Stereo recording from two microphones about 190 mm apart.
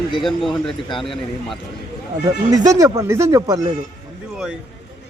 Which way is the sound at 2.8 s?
15° right (ahead or behind).